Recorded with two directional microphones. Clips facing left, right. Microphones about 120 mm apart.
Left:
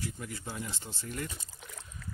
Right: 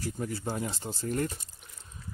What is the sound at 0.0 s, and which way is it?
Speech, 35° right (ahead or behind).